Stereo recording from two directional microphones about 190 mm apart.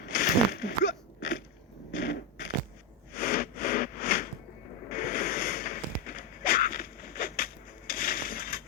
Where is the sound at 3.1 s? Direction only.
50° left (ahead or behind).